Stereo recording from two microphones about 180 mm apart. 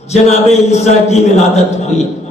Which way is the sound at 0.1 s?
40° left (ahead or behind).